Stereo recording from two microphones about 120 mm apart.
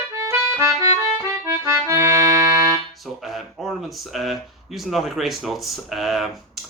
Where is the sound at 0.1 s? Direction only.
20° right (ahead or behind).